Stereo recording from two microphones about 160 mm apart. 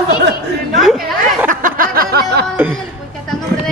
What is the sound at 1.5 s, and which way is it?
Music, 60° right (ahead or behind).